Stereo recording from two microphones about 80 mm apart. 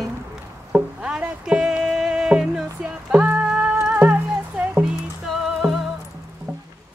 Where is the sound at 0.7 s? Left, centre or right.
Centre.